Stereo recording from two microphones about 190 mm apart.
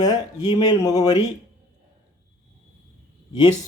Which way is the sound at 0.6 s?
20° left (ahead or behind).